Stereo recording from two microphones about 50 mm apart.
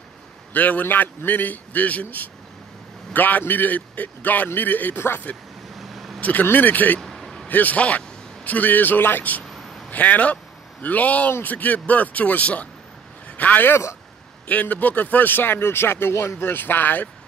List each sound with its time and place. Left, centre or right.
0.5 s a man's voice: left
5.8 s vehicle: centre
6.4 s a man's voice: left
7.0 s vehicle: centre
7.4 s a man's voice: left
13.7 s speech: left
14.5 s speech: left